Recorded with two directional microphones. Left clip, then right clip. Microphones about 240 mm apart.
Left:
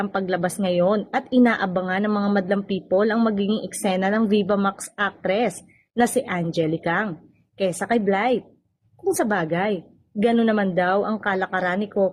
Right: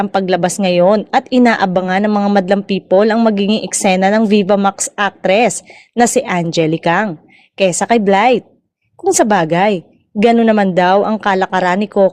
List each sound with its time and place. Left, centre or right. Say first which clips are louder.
0.0 s a woman's voice: right 10 dB; right